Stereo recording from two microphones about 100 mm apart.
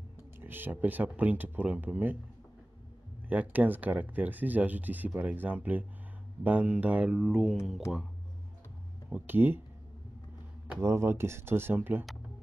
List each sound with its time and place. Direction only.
0.4 s speech: 20° right (ahead or behind)
3.3 s speech: 15° right (ahead or behind)
9.1 s speech: 20° right (ahead or behind)
10.8 s speech: 25° right (ahead or behind)